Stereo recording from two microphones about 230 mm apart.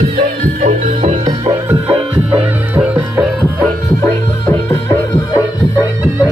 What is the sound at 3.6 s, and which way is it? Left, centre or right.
Music, centre.